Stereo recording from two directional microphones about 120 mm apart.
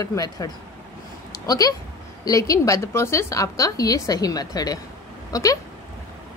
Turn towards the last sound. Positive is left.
turn(degrees=30)  # may be behind; listen again after turning